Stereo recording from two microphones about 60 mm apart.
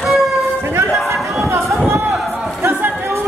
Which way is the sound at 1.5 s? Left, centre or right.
Right.